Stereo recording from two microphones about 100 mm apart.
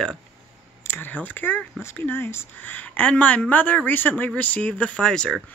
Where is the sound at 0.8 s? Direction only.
20° left (ahead or behind).